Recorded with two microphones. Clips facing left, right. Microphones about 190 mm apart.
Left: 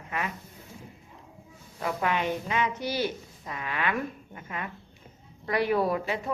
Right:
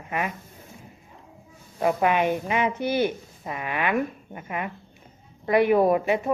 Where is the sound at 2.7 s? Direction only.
55° right (ahead or behind).